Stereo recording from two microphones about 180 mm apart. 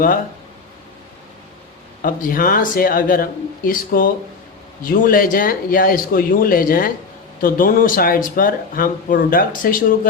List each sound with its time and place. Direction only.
2.0 s speech: 50° left (ahead or behind)